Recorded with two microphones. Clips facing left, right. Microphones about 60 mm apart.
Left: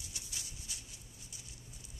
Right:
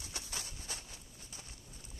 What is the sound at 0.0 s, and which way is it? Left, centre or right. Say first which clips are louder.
Clip-clop: right 4 dB; right.